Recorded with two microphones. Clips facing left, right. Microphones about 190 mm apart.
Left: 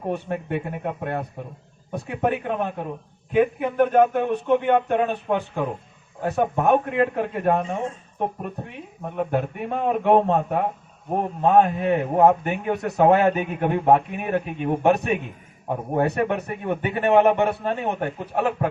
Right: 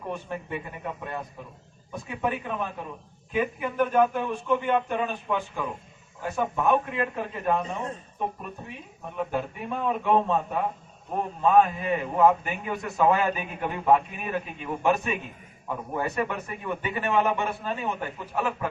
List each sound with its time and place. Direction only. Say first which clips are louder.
0.0 s a man's voice: left 7 dB; 60° left (ahead or behind)
15.7 s a man's voice: left 7 dB; 55° left (ahead or behind)